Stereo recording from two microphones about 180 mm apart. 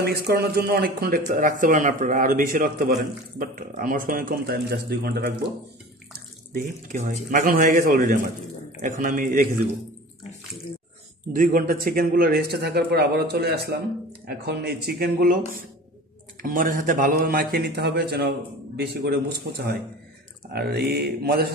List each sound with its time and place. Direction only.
0.0 s speech: 60° right (ahead or behind)
6.5 s speech: 50° right (ahead or behind)
11.3 s a man's voice: 50° right (ahead or behind)